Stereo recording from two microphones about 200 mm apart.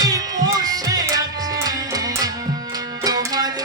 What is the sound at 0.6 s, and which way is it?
Music, 20° right (ahead or behind).